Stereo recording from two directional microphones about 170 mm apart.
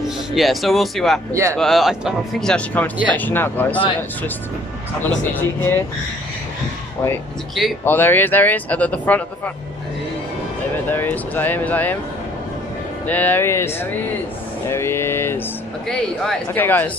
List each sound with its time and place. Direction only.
0.3 s speech: centre (ahead or behind)
1.3 s a man's voice: 15° right (ahead or behind)
1.6 s speech: centre (ahead or behind)
5.1 s speech: 10° left (ahead or behind)
7.8 s speech: 10° left (ahead or behind)
10.9 s speech: 10° left (ahead or behind)
13.0 s speech: 10° left (ahead or behind)